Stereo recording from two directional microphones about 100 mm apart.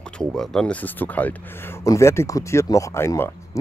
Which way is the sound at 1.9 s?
30° left (ahead or behind).